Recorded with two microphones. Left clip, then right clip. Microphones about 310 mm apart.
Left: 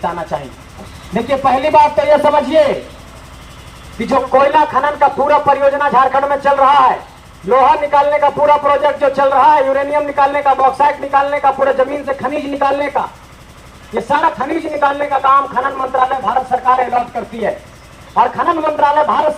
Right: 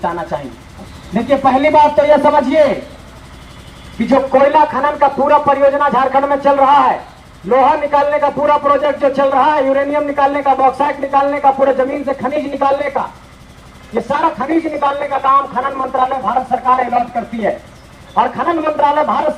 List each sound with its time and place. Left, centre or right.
0.0 s a man's voice: left
4.1 s a man's voice: centre